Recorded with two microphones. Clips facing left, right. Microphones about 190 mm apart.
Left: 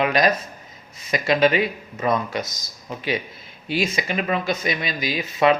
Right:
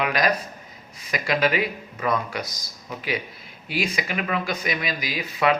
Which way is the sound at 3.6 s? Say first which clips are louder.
Left 3 dB; 25° left (ahead or behind).